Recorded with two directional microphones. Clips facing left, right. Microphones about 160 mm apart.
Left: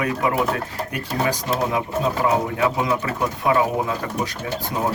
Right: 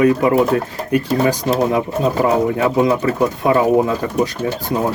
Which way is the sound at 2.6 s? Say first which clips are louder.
Right 6 dB; 35° right (ahead or behind).